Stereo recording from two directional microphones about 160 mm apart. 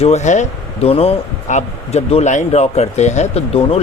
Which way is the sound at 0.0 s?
45° left (ahead or behind).